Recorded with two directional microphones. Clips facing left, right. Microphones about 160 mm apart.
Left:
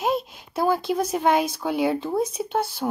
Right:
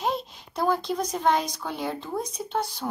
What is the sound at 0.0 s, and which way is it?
A woman's voice, 5° left (ahead or behind).